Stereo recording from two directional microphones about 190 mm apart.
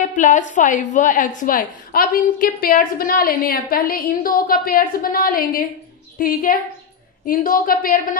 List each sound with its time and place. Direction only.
0.1 s a woman's voice: 40° left (ahead or behind)